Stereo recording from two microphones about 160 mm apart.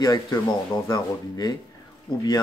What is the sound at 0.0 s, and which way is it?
Speech, 25° left (ahead or behind).